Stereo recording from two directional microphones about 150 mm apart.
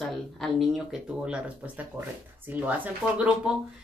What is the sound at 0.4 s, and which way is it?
Speech, centre (ahead or behind).